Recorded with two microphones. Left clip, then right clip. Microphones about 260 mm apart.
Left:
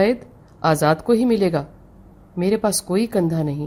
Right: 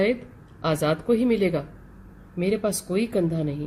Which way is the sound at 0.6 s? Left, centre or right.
Left.